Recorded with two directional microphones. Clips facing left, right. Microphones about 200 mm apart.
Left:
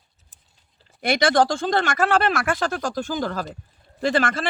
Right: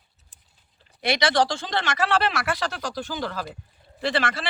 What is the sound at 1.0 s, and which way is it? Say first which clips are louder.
Speech: left 3 dB; 50° left (ahead or behind).